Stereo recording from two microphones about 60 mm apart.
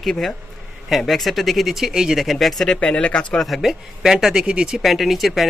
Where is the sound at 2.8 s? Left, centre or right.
Centre.